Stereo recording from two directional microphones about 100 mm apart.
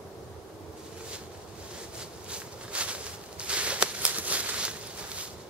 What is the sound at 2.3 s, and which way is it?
Walk, 10° right (ahead or behind).